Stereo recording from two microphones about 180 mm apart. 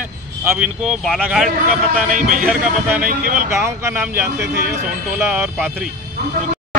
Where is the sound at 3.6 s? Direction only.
15° right (ahead or behind).